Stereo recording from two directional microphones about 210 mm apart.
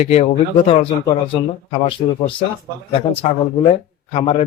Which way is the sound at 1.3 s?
25° left (ahead or behind).